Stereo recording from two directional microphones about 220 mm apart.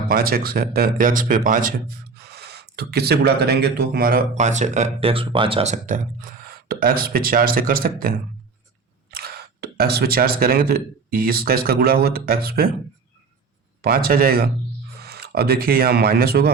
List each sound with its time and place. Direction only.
0.1 s speech: 40° right (ahead or behind)
13.8 s speech: 40° right (ahead or behind)